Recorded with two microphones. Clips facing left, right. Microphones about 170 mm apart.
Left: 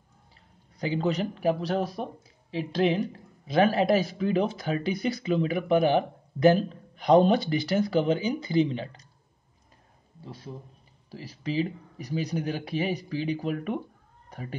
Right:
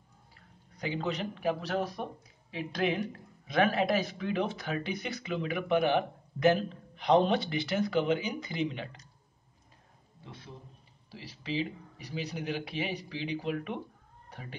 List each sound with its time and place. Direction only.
0.7 s speech: 35° left (ahead or behind)
10.2 s speech: 35° left (ahead or behind)